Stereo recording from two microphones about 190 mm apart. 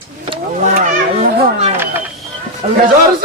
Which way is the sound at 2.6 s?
35° right (ahead or behind).